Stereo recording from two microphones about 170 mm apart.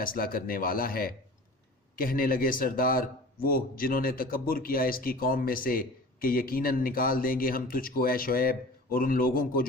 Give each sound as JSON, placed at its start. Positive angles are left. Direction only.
{"t": 0.0, "sound": "a man's voice", "side_deg": 55}